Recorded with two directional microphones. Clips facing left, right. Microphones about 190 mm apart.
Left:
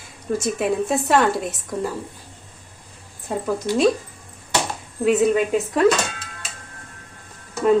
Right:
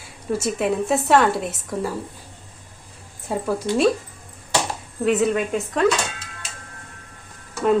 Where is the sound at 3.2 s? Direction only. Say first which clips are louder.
Even; 5° right (ahead or behind).